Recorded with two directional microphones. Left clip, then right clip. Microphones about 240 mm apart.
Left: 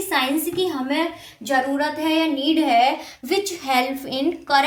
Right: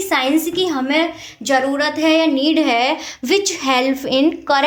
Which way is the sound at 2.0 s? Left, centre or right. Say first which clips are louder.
Right 8 dB; right.